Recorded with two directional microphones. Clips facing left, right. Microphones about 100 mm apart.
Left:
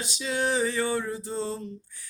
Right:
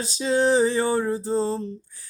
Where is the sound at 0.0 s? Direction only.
35° right (ahead or behind).